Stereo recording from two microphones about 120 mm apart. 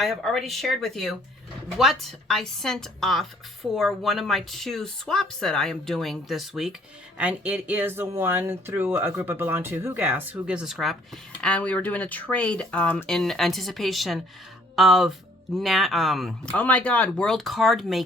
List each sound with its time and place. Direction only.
0.0 s speech: centre (ahead or behind)
11.3 s speech: 10° left (ahead or behind)
16.6 s speech: 10° left (ahead or behind)